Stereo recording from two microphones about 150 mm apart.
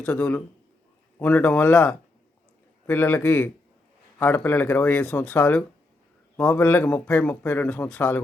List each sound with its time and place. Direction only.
0.0 s a man's voice: 10° left (ahead or behind)